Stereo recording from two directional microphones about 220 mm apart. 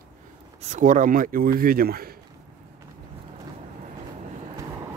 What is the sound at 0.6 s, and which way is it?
Speech, 30° right (ahead or behind).